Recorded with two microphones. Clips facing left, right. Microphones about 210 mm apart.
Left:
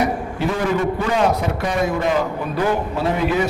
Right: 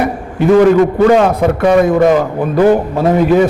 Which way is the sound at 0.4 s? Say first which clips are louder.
Right 13 dB; 55° right (ahead or behind).